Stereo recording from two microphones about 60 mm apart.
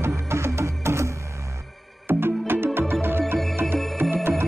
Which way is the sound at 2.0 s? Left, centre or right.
Right.